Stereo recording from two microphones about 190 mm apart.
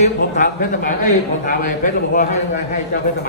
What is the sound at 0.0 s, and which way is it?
A man's voice, 45° left (ahead or behind).